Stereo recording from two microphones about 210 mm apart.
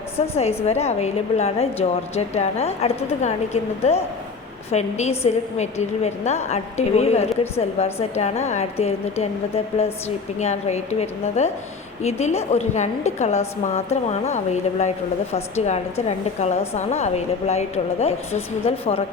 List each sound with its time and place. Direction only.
0.2 s a woman's voice: 30° left (ahead or behind)
10.4 s a woman's voice: 30° left (ahead or behind)